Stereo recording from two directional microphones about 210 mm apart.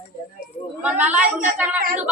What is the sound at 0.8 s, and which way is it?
Speech, 5° right (ahead or behind).